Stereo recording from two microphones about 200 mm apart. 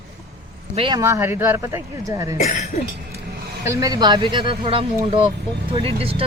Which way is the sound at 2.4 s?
35° left (ahead or behind).